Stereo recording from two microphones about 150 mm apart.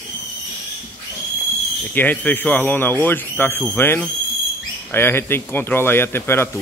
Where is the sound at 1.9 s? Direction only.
10° left (ahead or behind).